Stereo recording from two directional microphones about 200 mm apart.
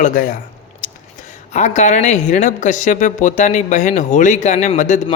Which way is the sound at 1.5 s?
35° left (ahead or behind).